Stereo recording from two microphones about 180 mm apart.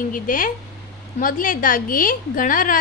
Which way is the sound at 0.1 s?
50° left (ahead or behind).